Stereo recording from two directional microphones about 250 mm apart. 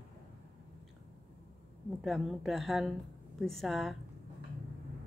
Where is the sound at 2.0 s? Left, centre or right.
Centre.